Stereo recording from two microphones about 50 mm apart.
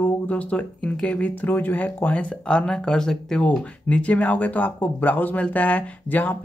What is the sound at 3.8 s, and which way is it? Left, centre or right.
Speech, left.